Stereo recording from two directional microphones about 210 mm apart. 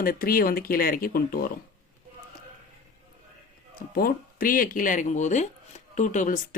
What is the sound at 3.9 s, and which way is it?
Speech, 45° left (ahead or behind).